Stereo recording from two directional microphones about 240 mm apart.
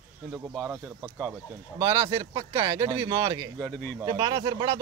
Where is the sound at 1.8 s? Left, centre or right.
Centre.